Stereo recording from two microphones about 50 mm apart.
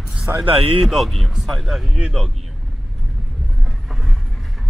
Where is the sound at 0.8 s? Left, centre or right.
Centre.